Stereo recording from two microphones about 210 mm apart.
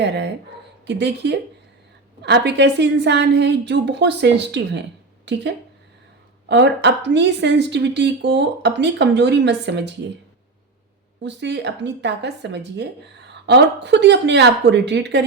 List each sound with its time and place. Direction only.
0.9 s a woman's voice: 55° right (ahead or behind)
11.2 s a woman's voice: 55° right (ahead or behind)